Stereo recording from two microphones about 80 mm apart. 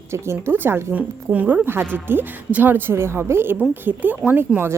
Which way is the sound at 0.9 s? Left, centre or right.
Centre.